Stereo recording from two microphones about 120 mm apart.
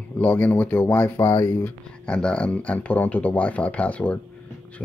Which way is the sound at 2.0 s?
10° left (ahead or behind).